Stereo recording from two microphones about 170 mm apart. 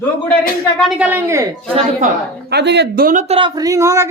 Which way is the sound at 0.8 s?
5° right (ahead or behind).